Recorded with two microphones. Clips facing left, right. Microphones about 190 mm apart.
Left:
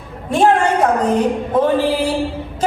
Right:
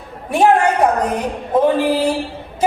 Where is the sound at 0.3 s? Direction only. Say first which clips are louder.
Even; 10° right (ahead or behind).